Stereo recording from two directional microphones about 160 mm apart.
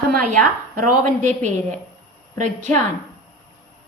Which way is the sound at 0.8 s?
55° right (ahead or behind).